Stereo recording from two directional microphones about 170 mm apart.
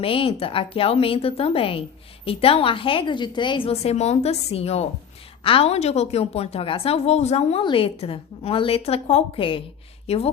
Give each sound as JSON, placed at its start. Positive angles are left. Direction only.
{"t": 0.0, "sound": "a woman's voice", "side_deg": 30}